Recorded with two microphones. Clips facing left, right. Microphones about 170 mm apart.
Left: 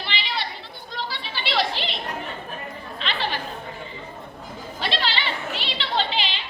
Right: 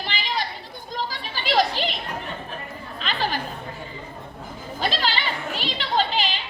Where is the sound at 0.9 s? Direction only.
45° right (ahead or behind).